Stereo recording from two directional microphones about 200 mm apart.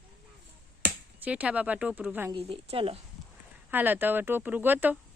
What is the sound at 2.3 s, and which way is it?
Speech, 30° right (ahead or behind).